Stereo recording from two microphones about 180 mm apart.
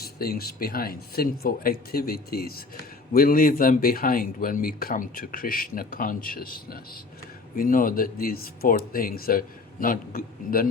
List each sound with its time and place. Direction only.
0.0 s speech: 60° left (ahead or behind)